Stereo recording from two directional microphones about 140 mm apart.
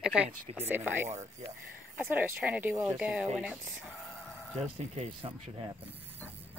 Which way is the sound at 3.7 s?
Centre (ahead or behind).